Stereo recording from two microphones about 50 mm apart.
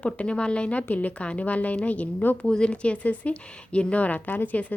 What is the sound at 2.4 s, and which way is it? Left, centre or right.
A woman's voice, centre.